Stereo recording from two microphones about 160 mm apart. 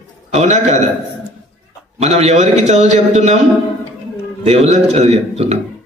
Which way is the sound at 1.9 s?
40° right (ahead or behind).